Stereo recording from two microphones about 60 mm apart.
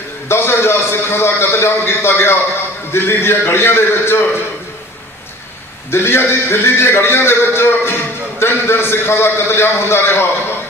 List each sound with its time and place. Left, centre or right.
0.3 s a man's voice: left
5.9 s a man's voice: left